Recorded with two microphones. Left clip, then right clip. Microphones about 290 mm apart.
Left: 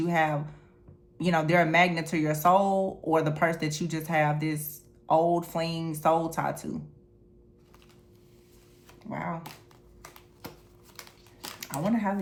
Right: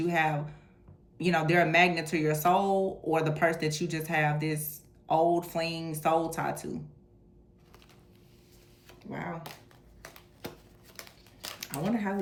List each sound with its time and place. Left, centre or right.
0.0 s speech: centre
9.0 s speech: left
10.0 s a sound: centre
11.9 s speech: left